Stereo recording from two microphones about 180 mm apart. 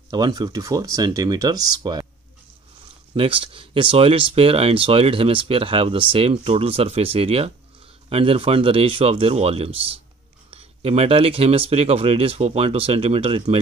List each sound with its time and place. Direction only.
0.1 s speech: 25° right (ahead or behind)
3.2 s speech: 30° right (ahead or behind)